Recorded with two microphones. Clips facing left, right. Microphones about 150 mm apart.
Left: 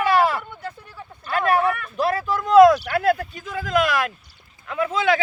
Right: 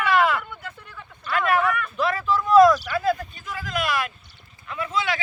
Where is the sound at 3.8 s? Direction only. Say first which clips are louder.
Left 4 dB; 90° left.